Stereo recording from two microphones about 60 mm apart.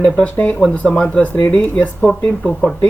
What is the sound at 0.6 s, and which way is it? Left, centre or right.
Speech, centre.